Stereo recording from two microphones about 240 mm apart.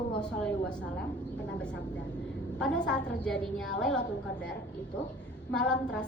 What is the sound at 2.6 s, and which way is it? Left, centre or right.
A woman's voice, centre.